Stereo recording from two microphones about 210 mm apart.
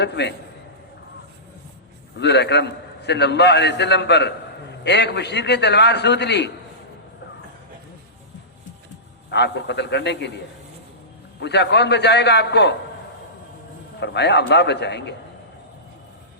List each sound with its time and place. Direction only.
0.0 s a man's voice: 55° left (ahead or behind)
2.1 s a man's voice: 55° left (ahead or behind)
9.3 s a man's voice: 55° left (ahead or behind)
11.3 s a man's voice: 55° left (ahead or behind)
14.0 s a man's voice: 55° left (ahead or behind)